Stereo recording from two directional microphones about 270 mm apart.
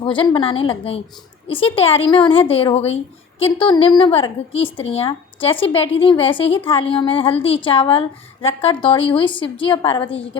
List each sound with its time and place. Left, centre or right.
0.0 s a woman's voice: centre